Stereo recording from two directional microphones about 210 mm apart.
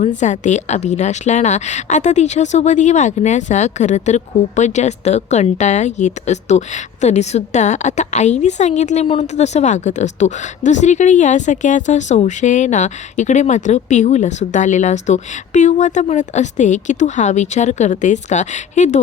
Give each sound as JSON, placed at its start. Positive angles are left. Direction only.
{"t": 0.2, "sound": "a woman's voice", "side_deg": 35}